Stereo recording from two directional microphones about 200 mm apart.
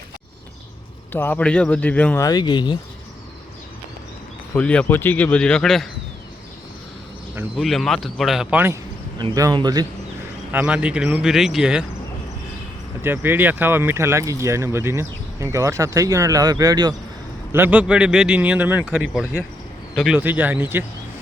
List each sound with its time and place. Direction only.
1.1 s speech: 10° left (ahead or behind)
4.5 s a man's voice: 5° left (ahead or behind)
7.5 s speech: centre (ahead or behind); by 9.8 s 20° right (ahead or behind)
10.5 s a man's voice: 5° right (ahead or behind)
13.0 s speech: 10° right (ahead or behind)
17.5 s a man's voice: 10° right (ahead or behind)